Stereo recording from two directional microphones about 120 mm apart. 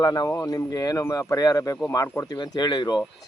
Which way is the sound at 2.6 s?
40° left (ahead or behind).